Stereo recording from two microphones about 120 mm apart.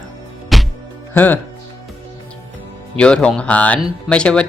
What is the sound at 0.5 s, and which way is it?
Music, centre (ahead or behind).